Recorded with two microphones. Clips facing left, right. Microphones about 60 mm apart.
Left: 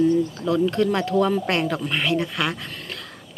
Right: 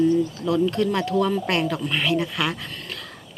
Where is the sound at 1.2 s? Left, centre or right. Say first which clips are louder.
Left 1 dB; centre.